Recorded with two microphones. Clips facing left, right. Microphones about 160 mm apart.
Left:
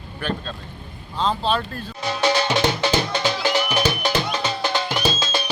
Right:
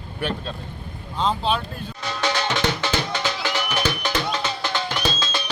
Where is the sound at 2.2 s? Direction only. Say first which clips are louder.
Left 4 dB; 15° left (ahead or behind).